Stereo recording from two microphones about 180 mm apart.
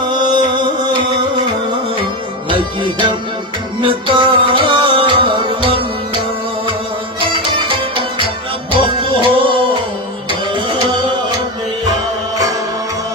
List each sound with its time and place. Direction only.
0.0 s a sound: 25° right (ahead or behind)
2.5 s music: 25° right (ahead or behind)
7.2 s music: 25° right (ahead or behind)